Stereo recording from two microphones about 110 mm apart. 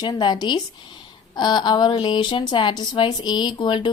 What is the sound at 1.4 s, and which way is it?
A woman's voice, 40° left (ahead or behind).